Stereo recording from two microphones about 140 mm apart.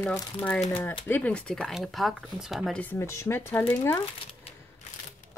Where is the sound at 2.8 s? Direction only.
15° left (ahead or behind).